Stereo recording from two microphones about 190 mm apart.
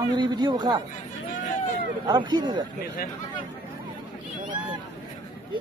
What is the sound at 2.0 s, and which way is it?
Speech, 20° right (ahead or behind).